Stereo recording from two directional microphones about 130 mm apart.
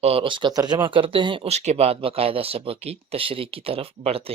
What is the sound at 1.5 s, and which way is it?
Speech, 55° right (ahead or behind).